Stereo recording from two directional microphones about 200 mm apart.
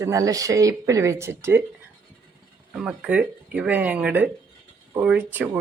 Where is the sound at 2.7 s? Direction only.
5° right (ahead or behind).